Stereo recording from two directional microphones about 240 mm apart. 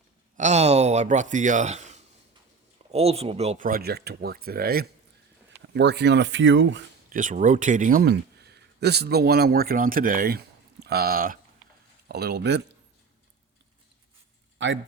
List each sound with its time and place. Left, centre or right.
0.3 s speech: right
7.1 s speech: right